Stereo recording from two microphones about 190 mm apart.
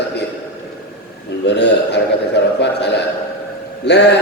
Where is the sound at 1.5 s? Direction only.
65° left (ahead or behind).